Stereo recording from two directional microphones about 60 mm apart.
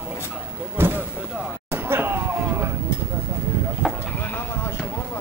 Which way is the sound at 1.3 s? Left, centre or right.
Centre.